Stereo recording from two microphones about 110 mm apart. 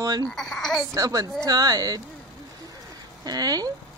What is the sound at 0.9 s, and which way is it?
Speech, 30° right (ahead or behind).